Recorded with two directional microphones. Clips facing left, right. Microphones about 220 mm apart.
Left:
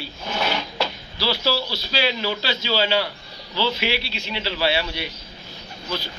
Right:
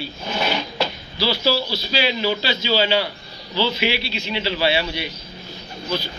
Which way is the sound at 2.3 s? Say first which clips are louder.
Right 3 dB; centre (ahead or behind).